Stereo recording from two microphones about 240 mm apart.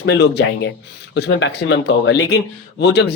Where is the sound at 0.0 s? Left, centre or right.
Left.